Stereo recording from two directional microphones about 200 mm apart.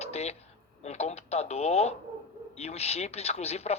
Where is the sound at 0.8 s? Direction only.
35° left (ahead or behind).